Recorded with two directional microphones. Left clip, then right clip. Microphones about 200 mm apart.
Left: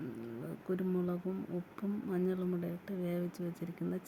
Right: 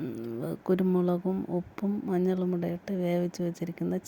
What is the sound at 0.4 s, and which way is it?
A woman's voice, 40° right (ahead or behind).